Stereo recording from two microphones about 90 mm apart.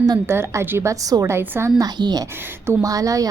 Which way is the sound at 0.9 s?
40° right (ahead or behind).